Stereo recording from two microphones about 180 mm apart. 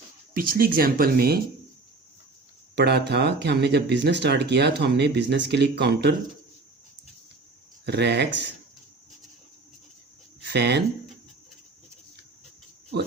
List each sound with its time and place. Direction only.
0.3 s speech: 55° right (ahead or behind)
2.7 s speech: 65° right (ahead or behind)
7.9 s speech: 70° right (ahead or behind)
10.5 s speech: 70° right (ahead or behind)